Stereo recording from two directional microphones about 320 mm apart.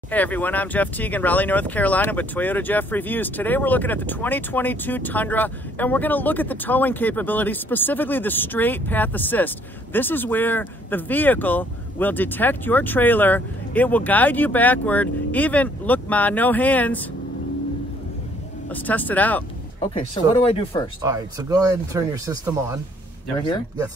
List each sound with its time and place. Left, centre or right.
0.1 s speech: centre
18.7 s speech: centre
20.2 s speech: centre
21.0 s speech: centre